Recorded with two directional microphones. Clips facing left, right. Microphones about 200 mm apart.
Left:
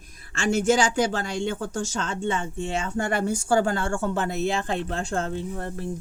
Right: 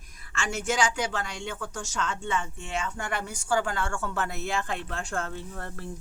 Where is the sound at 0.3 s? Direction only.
30° left (ahead or behind).